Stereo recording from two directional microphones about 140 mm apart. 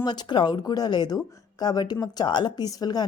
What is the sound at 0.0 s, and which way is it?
Speech, 30° left (ahead or behind).